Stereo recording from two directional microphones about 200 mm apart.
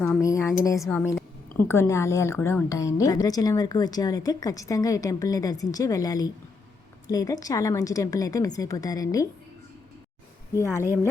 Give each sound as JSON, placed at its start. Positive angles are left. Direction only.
{"t": 0.0, "sound": "a woman's voice", "side_deg": 15}
{"t": 10.8, "sound": "a woman's voice", "side_deg": 15}